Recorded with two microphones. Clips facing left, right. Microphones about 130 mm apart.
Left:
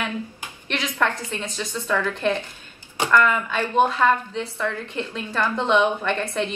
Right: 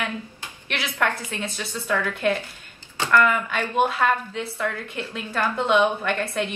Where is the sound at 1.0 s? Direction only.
10° right (ahead or behind).